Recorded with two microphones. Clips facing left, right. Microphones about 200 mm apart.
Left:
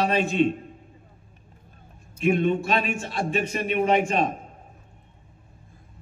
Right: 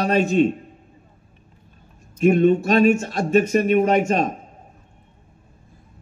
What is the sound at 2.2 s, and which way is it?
A man's voice, 40° right (ahead or behind).